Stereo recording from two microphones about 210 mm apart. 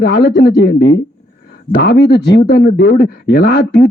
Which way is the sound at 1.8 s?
50° left (ahead or behind).